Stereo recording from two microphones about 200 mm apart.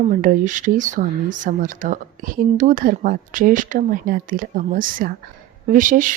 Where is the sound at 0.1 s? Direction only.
40° right (ahead or behind).